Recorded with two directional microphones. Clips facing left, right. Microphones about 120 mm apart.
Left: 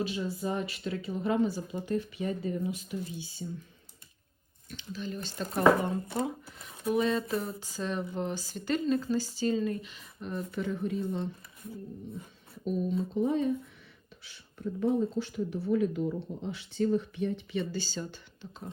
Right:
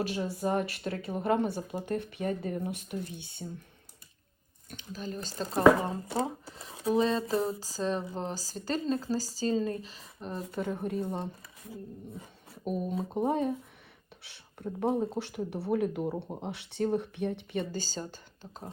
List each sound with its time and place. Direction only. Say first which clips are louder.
0.0 s speech: right 1 dB; 55° right (ahead or behind)
4.7 s a woman's voice: left 1 dB; 45° right (ahead or behind)
10.4 s speech: even; 50° right (ahead or behind)
12.6 s speech: left 2 dB; 55° right (ahead or behind)